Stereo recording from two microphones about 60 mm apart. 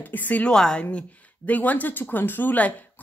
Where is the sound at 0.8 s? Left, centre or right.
Left.